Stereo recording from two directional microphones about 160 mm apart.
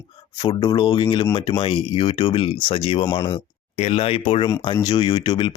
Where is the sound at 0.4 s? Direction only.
30° left (ahead or behind).